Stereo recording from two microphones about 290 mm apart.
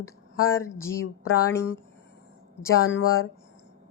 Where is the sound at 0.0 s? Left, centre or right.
Centre.